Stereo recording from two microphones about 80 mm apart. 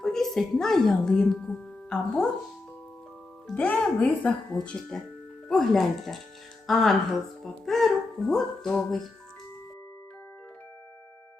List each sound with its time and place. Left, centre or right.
0.0 s a sound: centre
0.6 s a woman's voice: centre
3.5 s a woman's voice: centre